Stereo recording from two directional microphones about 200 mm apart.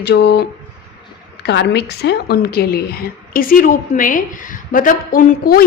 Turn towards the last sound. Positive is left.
turn(degrees=45)  # may be behind; listen again after turning